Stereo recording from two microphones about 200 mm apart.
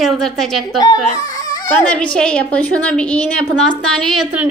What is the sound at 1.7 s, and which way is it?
Speech, 5° left (ahead or behind).